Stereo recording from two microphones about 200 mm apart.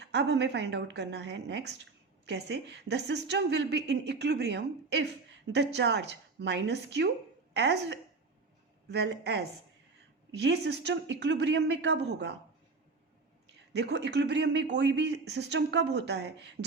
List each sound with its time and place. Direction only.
0.0 s a woman's voice: 60° right (ahead or behind)
13.5 s a woman's voice: 60° right (ahead or behind)